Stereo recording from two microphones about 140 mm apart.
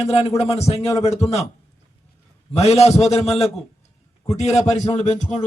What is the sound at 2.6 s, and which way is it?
A man's voice, 50° left (ahead or behind).